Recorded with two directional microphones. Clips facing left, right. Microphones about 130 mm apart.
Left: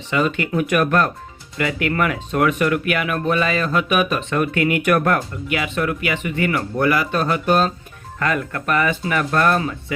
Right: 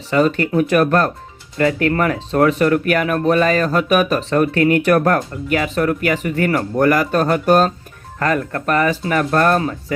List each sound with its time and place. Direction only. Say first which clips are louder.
0.1 s speech: right 5 dB; 40° right (ahead or behind)